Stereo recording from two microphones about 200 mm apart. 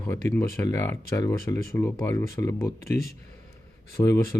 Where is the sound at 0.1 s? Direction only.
10° left (ahead or behind).